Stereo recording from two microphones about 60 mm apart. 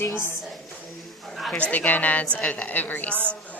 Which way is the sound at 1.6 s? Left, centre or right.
Left.